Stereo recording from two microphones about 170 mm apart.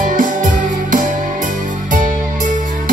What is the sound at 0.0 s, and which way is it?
Music, 50° right (ahead or behind).